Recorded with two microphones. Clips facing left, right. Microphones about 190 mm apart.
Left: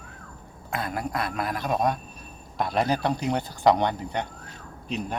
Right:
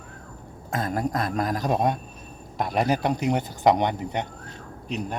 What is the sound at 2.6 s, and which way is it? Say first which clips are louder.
Speech: right 1 dB; 15° right (ahead or behind).